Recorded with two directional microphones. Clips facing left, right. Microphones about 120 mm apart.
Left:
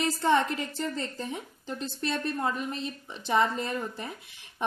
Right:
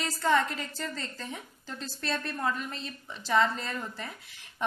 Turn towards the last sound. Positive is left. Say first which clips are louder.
# left 4 dB
turn(degrees=20)  # may be behind; listen again after turning